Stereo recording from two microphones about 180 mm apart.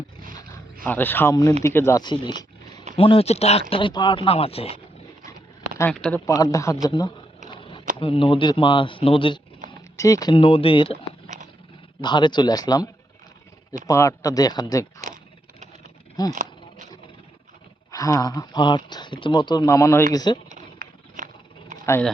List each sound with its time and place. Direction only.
0.9 s speech: 10° left (ahead or behind); by 4.8 s 35° left (ahead or behind)
5.9 s speech: 5° left (ahead or behind)
6.2 s speech: 20° left (ahead or behind)
7.5 s a sound: 30° left (ahead or behind)
7.9 s speech: 30° left (ahead or behind)
12.0 s speech: 25° left (ahead or behind)
16.3 s a sound: 45° right (ahead or behind)
17.9 s speech: 20° left (ahead or behind)
20.5 s a sound: 50° right (ahead or behind)